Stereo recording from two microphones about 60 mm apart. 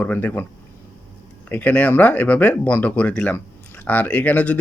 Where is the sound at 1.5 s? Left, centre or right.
Left.